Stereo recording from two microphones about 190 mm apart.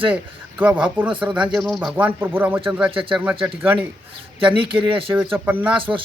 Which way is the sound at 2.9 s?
25° right (ahead or behind).